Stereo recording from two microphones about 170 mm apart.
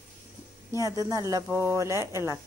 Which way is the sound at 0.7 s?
20° right (ahead or behind).